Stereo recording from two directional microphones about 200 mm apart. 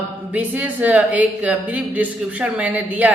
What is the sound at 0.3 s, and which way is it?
Speech, 5° right (ahead or behind).